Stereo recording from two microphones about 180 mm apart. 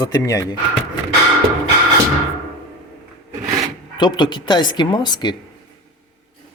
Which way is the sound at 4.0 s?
25° left (ahead or behind).